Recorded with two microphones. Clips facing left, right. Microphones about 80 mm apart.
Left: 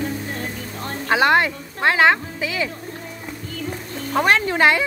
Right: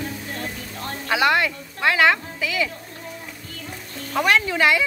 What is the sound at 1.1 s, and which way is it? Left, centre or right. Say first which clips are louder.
Speech: left 3 dB; left.